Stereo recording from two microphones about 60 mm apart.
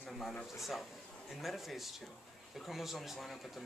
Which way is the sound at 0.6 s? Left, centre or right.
Centre.